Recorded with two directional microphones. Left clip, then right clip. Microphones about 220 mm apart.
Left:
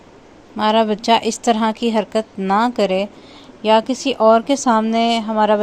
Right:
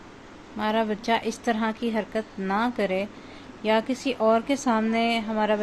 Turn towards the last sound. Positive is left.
turn(degrees=30)  # may be behind; listen again after turning